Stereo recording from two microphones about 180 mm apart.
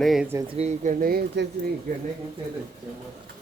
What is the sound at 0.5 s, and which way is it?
Speech, 40° right (ahead or behind).